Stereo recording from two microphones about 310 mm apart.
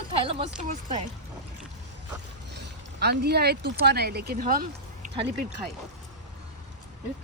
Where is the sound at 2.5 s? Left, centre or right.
Right.